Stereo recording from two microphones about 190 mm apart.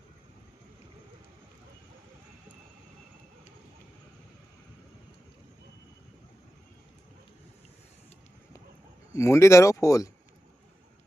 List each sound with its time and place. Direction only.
9.1 s speech: 15° left (ahead or behind)